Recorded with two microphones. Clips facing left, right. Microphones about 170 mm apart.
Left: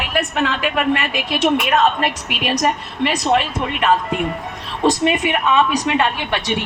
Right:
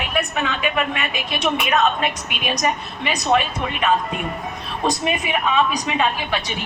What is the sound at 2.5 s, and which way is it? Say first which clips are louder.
Speech: left 3 dB; 70° left (ahead or behind).